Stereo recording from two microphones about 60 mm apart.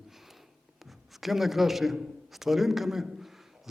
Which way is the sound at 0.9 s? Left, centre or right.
Centre.